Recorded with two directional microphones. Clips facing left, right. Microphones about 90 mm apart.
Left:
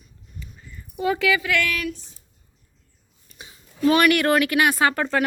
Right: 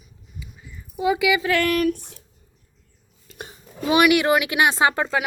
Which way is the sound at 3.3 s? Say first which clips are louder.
Right 8 dB; 90° right.